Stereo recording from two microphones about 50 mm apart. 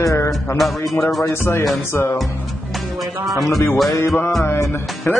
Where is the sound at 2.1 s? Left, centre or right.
Centre.